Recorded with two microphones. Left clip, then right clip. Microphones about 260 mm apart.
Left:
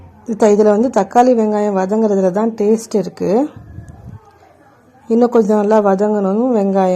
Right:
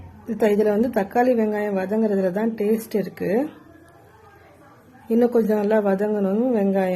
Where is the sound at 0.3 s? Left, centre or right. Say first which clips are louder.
Left 8 dB; centre.